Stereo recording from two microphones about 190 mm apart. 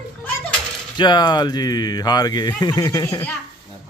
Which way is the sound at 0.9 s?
25° left (ahead or behind).